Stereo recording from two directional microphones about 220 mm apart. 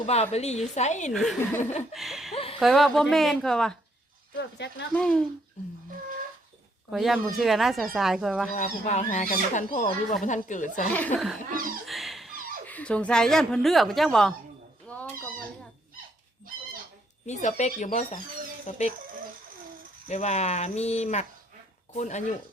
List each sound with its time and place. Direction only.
0.0 s speech: 30° left (ahead or behind)
1.1 s speech: centre (ahead or behind)
2.3 s a sound: 25° left (ahead or behind)
2.6 s speech: centre (ahead or behind)
4.4 s speech: 55° left (ahead or behind)
4.9 s speech: 5° left (ahead or behind)
6.9 s speech: centre (ahead or behind)
8.4 s speech: 30° left (ahead or behind)
10.9 s speech: 5° left (ahead or behind)
14.8 s cat: 5° left (ahead or behind)
17.2 s speech: 30° left (ahead or behind)
20.1 s speech: 30° left (ahead or behind)